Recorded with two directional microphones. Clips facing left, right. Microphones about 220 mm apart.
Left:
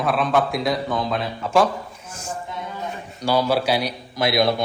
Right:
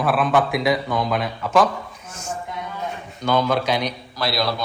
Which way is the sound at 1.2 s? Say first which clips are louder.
Left 1 dB; 30° left (ahead or behind).